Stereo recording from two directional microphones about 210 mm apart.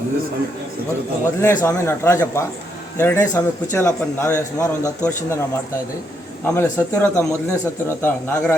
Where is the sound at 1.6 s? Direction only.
10° left (ahead or behind).